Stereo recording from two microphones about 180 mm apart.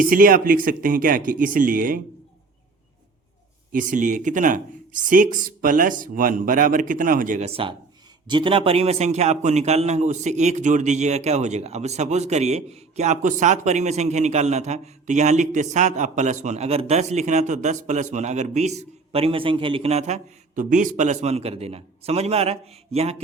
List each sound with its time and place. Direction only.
0.0 s speech: 50° right (ahead or behind)
3.7 s a man's voice: 45° right (ahead or behind)